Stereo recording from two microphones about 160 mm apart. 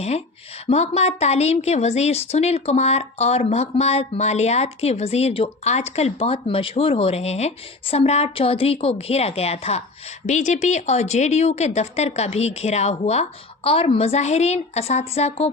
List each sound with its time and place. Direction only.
0.7 s speech: 40° left (ahead or behind)